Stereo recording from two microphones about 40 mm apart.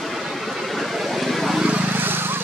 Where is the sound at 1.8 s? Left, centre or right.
Right.